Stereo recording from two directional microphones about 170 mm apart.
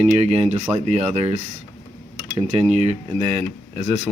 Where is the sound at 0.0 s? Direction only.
40° right (ahead or behind).